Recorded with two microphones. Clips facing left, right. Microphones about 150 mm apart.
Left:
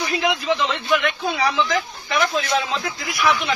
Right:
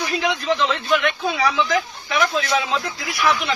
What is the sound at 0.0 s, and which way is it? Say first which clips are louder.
Speech: left 1 dB; 5° left (ahead or behind).